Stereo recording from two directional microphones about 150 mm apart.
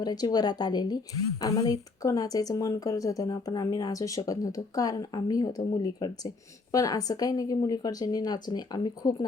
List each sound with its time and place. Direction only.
0.0 s a woman's voice: 25° left (ahead or behind)